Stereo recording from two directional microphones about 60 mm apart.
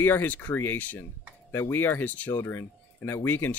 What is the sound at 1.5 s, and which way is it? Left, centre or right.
Speech, left.